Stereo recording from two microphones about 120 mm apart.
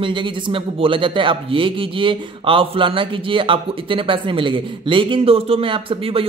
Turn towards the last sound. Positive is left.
turn(degrees=-50)  # may be behind; listen again after turning